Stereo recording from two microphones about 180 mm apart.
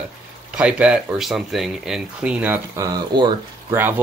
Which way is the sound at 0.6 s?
5° right (ahead or behind).